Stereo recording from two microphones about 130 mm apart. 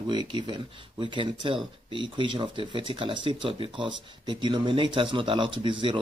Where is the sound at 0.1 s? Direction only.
35° right (ahead or behind).